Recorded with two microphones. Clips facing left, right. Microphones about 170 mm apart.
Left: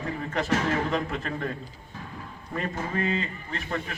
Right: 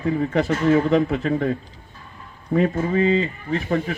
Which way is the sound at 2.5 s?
65° right (ahead or behind).